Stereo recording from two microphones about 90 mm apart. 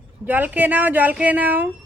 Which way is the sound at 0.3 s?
20° right (ahead or behind).